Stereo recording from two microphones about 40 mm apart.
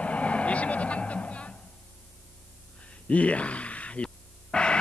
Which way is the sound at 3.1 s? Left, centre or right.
Left.